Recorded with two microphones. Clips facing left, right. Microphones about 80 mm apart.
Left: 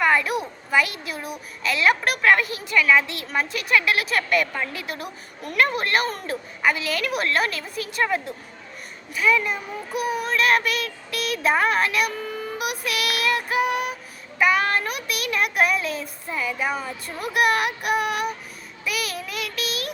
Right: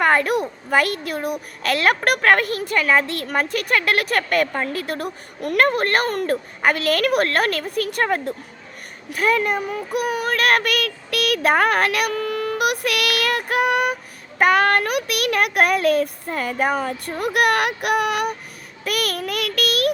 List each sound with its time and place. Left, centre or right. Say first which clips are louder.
0.0 s a child's voice: right 3 dB; right
18.9 s child singing: right 5 dB; right